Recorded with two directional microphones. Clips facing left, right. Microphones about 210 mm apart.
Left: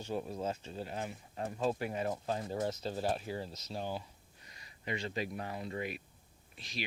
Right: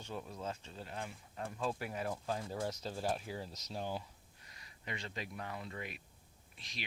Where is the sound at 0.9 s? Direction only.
20° left (ahead or behind).